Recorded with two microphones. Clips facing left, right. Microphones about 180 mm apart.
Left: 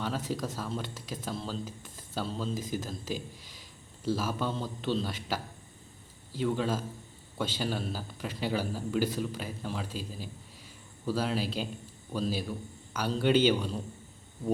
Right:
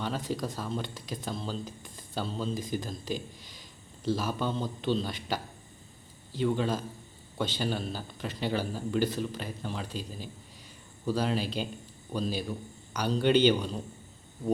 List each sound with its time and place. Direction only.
0.0 s speech: 5° left (ahead or behind)